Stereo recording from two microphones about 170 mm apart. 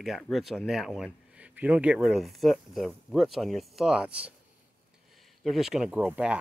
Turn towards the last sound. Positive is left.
turn(degrees=-5)  # may be behind; listen again after turning